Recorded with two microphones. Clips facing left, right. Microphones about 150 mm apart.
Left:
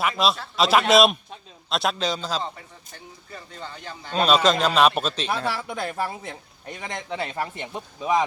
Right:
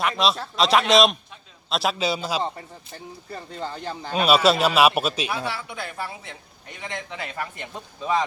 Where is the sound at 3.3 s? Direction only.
35° right (ahead or behind).